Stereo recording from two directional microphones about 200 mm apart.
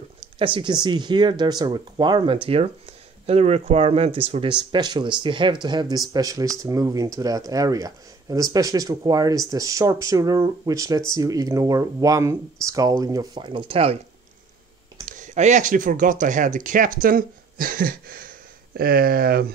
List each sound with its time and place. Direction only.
0.6 s speech: 20° right (ahead or behind)
15.0 s speech: 40° right (ahead or behind)